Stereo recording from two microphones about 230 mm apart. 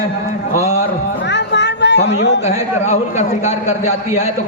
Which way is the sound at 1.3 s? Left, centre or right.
Left.